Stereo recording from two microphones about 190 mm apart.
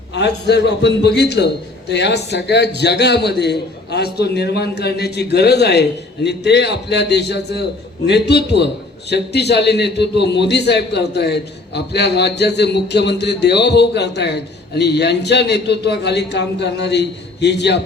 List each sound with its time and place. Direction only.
0.1 s a man's voice: 65° left (ahead or behind)